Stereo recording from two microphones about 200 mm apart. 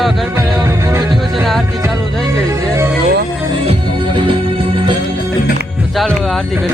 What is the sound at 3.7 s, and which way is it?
Music, 25° right (ahead or behind).